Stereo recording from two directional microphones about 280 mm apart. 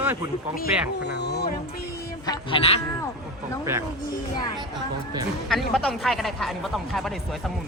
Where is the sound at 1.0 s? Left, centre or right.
Left.